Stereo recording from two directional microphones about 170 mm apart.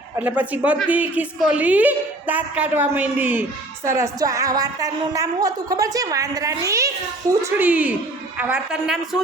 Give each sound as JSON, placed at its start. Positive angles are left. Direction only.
{"t": 0.2, "sound": "a woman's voice", "side_deg": -10}